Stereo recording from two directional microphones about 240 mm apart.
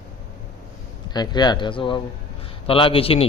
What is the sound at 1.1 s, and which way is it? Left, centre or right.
A man's voice, centre.